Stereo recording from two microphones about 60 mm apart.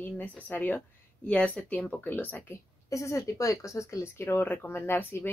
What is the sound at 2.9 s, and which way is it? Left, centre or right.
Speech, left.